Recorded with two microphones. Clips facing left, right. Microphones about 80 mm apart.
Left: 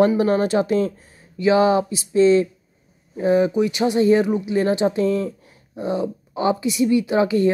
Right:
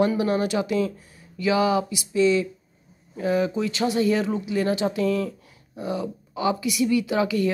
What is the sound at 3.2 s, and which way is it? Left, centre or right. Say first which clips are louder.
Speech: left 6 dB; left.